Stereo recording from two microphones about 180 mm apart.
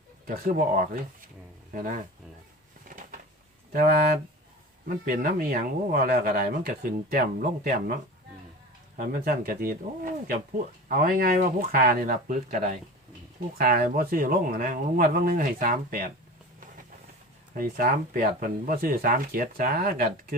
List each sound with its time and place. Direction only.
0.3 s speech: 55° right (ahead or behind)
2.8 s a sound: 50° right (ahead or behind)
3.7 s speech: 55° right (ahead or behind)
9.0 s speech: 50° right (ahead or behind)
17.6 s speech: 50° right (ahead or behind)